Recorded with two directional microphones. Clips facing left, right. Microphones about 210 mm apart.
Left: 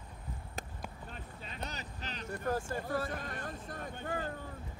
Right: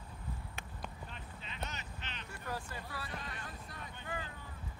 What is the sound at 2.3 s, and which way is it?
Vehicle, 50° left (ahead or behind).